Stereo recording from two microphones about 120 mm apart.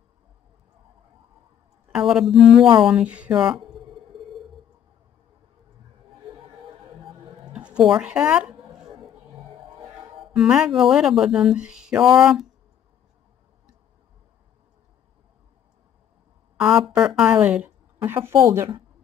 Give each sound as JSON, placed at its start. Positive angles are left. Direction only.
{"t": 2.0, "sound": "speech", "side_deg": -5}
{"t": 7.4, "sound": "a sound", "side_deg": -10}
{"t": 10.3, "sound": "speech", "side_deg": -5}
{"t": 16.9, "sound": "speech", "side_deg": -5}